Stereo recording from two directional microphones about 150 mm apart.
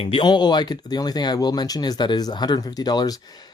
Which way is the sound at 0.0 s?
35° left (ahead or behind).